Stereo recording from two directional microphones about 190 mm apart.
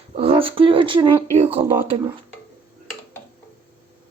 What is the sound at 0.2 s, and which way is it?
Speech, 30° right (ahead or behind).